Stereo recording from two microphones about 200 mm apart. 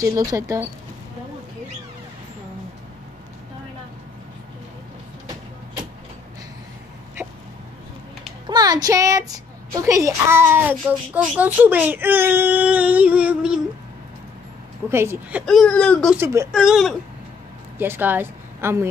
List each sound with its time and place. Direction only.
0.0 s speech: 15° right (ahead or behind)
8.5 s speech: 20° right (ahead or behind)
14.9 s speech: 10° right (ahead or behind)
15.4 s speech: 5° left (ahead or behind); by 18.9 s 10° right (ahead or behind)